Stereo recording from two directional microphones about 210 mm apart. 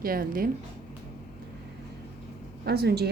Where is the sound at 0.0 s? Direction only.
45° right (ahead or behind).